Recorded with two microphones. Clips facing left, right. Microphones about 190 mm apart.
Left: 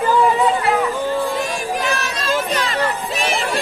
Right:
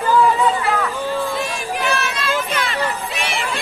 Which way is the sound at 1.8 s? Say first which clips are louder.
Right 1 dB; 35° left (ahead or behind).